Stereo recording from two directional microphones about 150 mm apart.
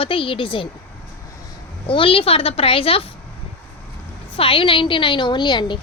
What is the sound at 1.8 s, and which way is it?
A woman's voice, 35° left (ahead or behind).